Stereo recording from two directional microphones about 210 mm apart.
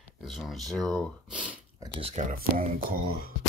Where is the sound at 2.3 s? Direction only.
45° right (ahead or behind).